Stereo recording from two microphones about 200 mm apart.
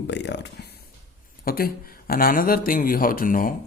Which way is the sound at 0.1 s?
60° left (ahead or behind).